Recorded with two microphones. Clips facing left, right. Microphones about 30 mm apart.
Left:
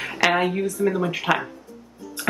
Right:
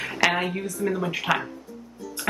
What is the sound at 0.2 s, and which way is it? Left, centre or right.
Speech, centre.